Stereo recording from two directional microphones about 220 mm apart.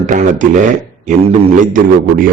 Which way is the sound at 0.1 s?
35° right (ahead or behind).